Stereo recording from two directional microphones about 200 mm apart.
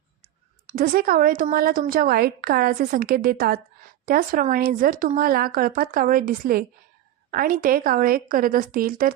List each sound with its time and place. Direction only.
0.7 s a woman's voice: 45° right (ahead or behind)